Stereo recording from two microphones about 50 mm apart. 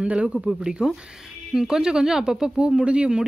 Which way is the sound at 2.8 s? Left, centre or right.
Right.